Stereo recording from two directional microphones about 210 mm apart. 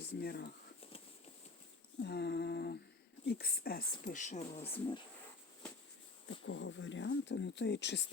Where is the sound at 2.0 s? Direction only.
55° left (ahead or behind).